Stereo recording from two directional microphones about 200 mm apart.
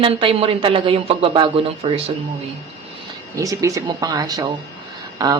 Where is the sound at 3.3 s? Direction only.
15° right (ahead or behind).